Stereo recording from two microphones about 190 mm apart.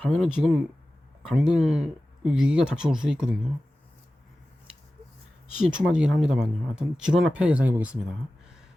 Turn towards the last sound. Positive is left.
turn(degrees=-5)  # may be behind; listen again after turning